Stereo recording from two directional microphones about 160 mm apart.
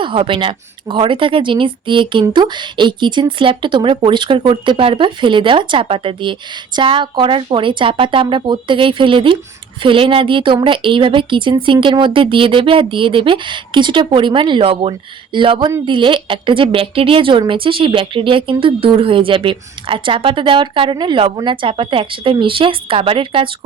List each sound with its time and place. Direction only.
0.0 s speech: 30° right (ahead or behind)